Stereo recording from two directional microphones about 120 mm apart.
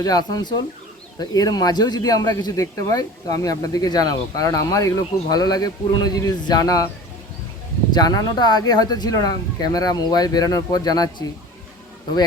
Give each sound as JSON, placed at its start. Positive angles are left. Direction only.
{"t": 0.0, "sound": "speech", "side_deg": 30}
{"t": 7.9, "sound": "speech", "side_deg": 35}